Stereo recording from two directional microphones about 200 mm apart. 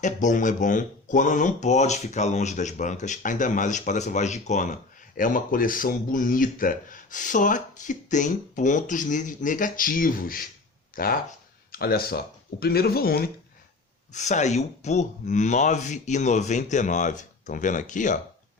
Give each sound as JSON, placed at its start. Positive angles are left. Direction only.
{"t": 0.0, "sound": "speech", "side_deg": 40}
{"t": 14.1, "sound": "speech", "side_deg": 35}